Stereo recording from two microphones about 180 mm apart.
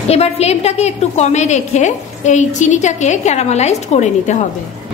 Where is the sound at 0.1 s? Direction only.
35° left (ahead or behind).